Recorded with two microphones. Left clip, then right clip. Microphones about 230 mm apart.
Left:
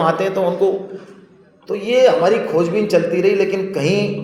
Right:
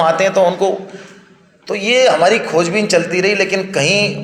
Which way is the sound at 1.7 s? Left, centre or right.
Centre.